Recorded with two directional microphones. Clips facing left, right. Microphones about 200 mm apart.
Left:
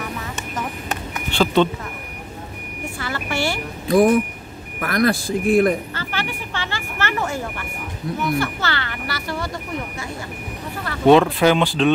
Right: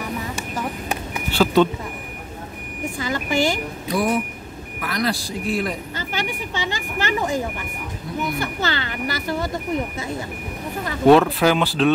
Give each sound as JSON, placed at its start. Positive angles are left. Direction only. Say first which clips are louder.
{"t": 1.1, "sound": "a sound", "louder": "right 1 dB", "side_deg": -10}
{"t": 3.0, "sound": "vehicle", "louder": "right 3 dB", "side_deg": -15}
{"t": 3.8, "sound": "a sound", "louder": "left 8 dB", "side_deg": 50}
{"t": 4.7, "sound": "speech", "louder": "left 5 dB", "side_deg": 50}
{"t": 5.9, "sound": "vehicle", "louder": "right 1 dB", "side_deg": -15}
{"t": 8.4, "sound": "speech", "louder": "left 1 dB", "side_deg": -20}
{"t": 11.1, "sound": "speech", "louder": "left 1 dB", "side_deg": 0}